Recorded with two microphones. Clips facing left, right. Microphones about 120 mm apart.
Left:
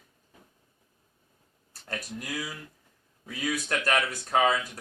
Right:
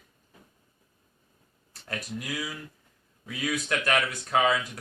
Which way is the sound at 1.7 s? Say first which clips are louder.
Even; 40° left (ahead or behind).